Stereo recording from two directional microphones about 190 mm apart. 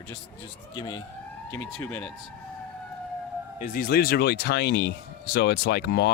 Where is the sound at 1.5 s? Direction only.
10° left (ahead or behind).